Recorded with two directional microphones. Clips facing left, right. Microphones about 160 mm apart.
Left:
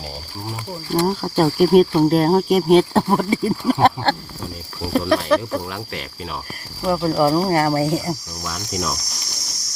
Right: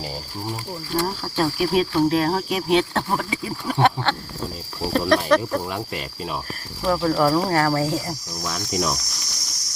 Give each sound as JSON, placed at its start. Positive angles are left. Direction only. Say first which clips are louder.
{"t": 0.9, "sound": "speech", "louder": "left 5 dB", "side_deg": 30}
{"t": 3.7, "sound": "speech", "louder": "left 5 dB", "side_deg": 5}
{"t": 4.9, "sound": "speech", "louder": "left 1 dB", "side_deg": 5}
{"t": 6.8, "sound": "speech", "louder": "left 2 dB", "side_deg": 10}
{"t": 8.4, "sound": "speech", "louder": "right 1 dB", "side_deg": 0}